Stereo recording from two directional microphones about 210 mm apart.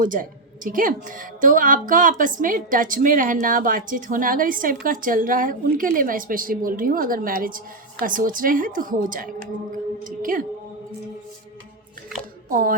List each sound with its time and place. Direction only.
0.0 s a woman's voice: 40° right (ahead or behind)
12.5 s speech: 40° right (ahead or behind)